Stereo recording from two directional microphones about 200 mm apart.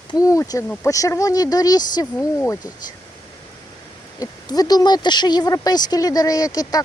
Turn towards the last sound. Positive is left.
turn(degrees=20)  # may be behind; listen again after turning